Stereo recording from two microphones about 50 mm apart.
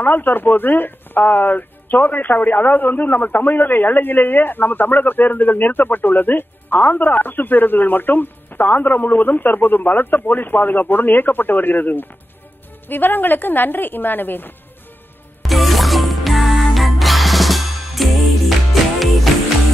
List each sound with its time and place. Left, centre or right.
0.0 s speech: left
15.4 s music: centre